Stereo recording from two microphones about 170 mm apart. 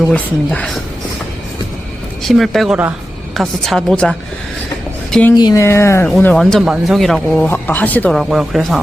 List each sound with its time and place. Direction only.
0.0 s speech: 5° left (ahead or behind)
2.2 s speech: centre (ahead or behind)
5.4 s speech: 20° left (ahead or behind)
8.2 s speech: centre (ahead or behind)